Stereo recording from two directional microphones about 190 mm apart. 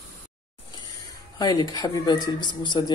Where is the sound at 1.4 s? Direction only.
20° left (ahead or behind).